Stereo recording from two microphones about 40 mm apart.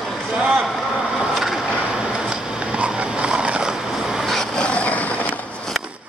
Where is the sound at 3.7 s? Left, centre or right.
Centre.